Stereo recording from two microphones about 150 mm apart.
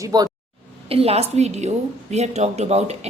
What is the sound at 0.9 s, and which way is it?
A woman's voice, 40° right (ahead or behind).